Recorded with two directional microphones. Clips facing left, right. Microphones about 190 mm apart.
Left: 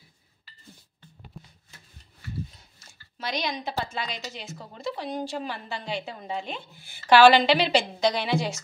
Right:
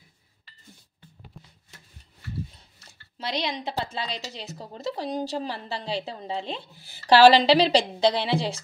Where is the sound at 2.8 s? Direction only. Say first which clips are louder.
Right 1 dB; 30° right (ahead or behind).